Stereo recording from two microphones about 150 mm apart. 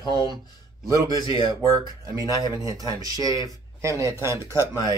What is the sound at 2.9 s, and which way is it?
Speech, 25° right (ahead or behind).